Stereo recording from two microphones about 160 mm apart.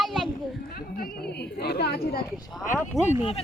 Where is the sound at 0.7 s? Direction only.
65° left (ahead or behind).